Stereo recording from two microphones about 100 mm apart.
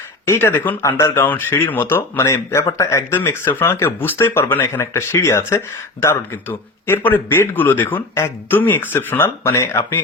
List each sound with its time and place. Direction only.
0.3 s speech: 25° left (ahead or behind)